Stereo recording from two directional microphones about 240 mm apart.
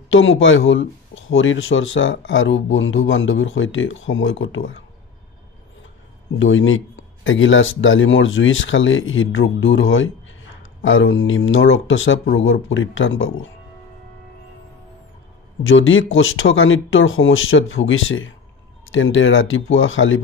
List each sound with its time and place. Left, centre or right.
0.1 s speech: left
6.4 s speech: left
15.6 s speech: left